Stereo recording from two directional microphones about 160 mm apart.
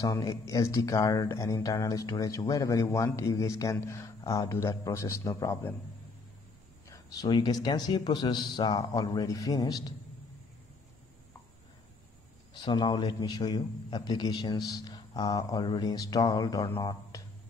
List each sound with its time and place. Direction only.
0.0 s speech: 20° left (ahead or behind)
6.9 s speech: 25° left (ahead or behind)
12.5 s speech: 30° left (ahead or behind)